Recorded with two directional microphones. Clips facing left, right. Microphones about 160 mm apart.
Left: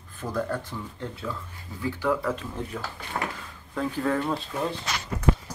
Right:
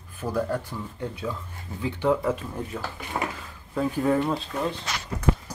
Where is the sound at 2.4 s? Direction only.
5° right (ahead or behind).